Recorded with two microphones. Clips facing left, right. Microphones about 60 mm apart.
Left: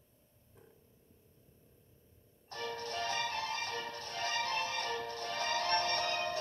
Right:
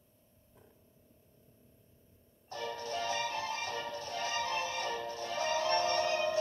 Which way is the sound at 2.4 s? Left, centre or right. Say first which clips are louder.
Right 1 dB; left.